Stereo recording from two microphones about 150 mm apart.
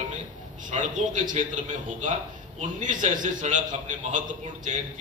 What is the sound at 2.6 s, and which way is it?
A man's voice, 55° right (ahead or behind).